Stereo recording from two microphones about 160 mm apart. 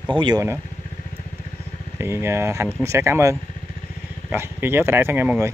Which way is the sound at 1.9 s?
15° right (ahead or behind).